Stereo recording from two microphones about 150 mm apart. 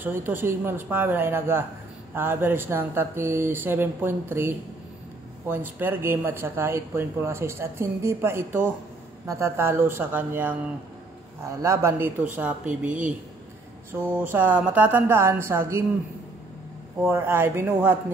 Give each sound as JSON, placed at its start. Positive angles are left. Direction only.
{"t": 0.0, "sound": "a man's voice", "side_deg": -15}
{"t": 12.4, "sound": "speech", "side_deg": -10}
{"t": 14.1, "sound": "speech", "side_deg": -10}
{"t": 17.0, "sound": "speech", "side_deg": -15}